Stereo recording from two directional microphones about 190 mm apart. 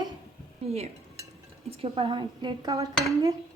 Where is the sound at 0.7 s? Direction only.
35° right (ahead or behind).